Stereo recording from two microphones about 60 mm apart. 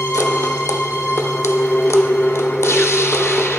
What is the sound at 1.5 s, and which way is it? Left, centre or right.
Music, left.